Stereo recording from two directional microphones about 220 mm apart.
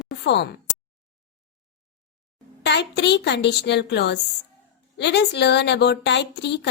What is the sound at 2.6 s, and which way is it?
A woman's voice, 50° left (ahead or behind).